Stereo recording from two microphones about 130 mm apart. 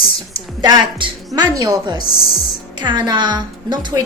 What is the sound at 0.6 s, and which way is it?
A woman's voice, 30° right (ahead or behind).